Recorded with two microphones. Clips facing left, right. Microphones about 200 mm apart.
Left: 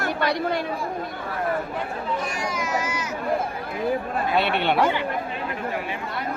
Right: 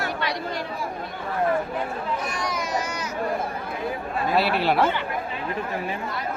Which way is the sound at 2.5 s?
40° right (ahead or behind).